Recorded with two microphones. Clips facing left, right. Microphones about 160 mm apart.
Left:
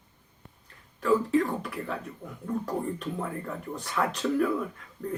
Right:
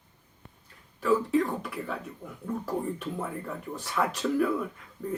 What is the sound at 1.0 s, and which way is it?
Speech, centre (ahead or behind).